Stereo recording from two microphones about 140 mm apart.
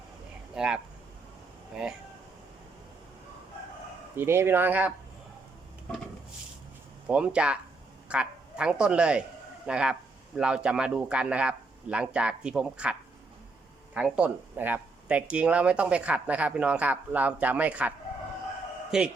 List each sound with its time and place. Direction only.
0.5 s speech: 5° right (ahead or behind)
4.1 s speech: 15° right (ahead or behind)
7.1 s speech: 10° right (ahead or behind)